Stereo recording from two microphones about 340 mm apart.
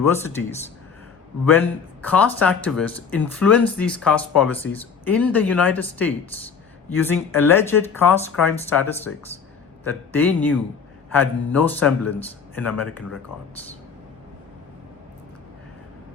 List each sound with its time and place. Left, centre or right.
0.1 s speech: centre
1.5 s speech: centre